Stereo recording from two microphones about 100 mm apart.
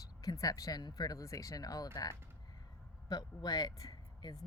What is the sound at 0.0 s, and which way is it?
Speech, 35° left (ahead or behind).